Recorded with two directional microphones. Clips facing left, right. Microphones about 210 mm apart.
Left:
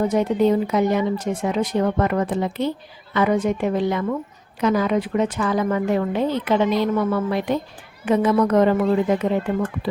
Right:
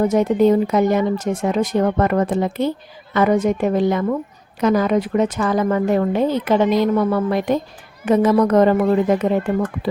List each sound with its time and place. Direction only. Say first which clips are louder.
0.0 s speech: right 3 dB; 45° right (ahead or behind)